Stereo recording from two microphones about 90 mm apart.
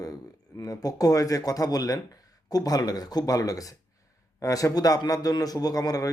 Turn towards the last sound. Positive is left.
turn(degrees=45)  # may be behind; listen again after turning